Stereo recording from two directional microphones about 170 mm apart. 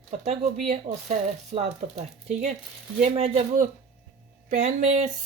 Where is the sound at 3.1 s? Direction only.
40° right (ahead or behind).